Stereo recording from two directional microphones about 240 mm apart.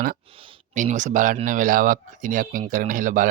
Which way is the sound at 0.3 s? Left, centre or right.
Right.